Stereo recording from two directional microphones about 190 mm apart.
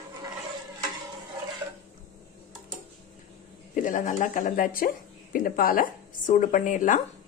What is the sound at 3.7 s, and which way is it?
Speech, 45° left (ahead or behind).